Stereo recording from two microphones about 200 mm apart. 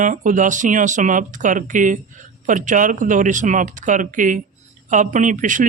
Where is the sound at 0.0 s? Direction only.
40° right (ahead or behind).